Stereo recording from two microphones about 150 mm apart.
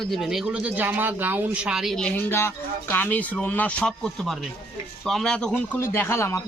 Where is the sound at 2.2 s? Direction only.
15° left (ahead or behind).